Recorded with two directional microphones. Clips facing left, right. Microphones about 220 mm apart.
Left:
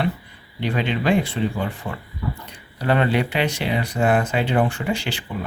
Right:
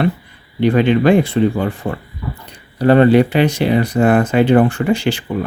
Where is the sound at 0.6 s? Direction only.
55° right (ahead or behind).